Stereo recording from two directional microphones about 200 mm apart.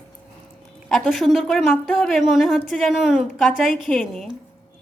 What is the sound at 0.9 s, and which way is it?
A woman's voice, centre (ahead or behind).